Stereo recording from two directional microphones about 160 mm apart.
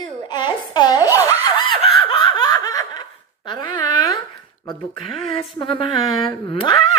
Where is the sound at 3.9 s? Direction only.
25° left (ahead or behind).